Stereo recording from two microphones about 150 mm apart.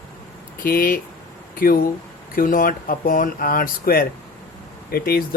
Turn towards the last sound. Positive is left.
turn(degrees=85)